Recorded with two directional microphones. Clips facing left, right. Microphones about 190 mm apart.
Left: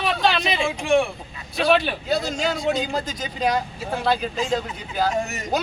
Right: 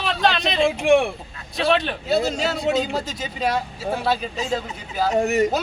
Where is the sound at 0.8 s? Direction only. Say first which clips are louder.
Right 2 dB; 60° right (ahead or behind).